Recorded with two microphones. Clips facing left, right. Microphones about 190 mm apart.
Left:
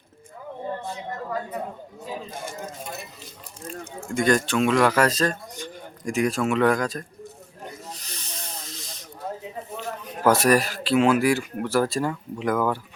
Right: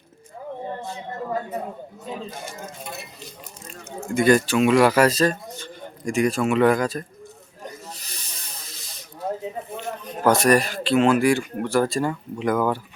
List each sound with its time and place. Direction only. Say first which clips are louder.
2.3 s speech: left 1 dB; 50° left (ahead or behind)
4.0 s speech: right 4 dB; 5° right (ahead or behind)
7.9 s snake: left 3 dB; 10° right (ahead or behind)
10.2 s speech: right 1 dB; 5° left (ahead or behind)